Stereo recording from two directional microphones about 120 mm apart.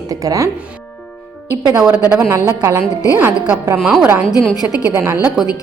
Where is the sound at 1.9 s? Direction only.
10° right (ahead or behind).